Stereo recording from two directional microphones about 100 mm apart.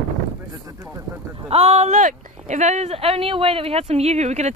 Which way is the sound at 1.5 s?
85° right.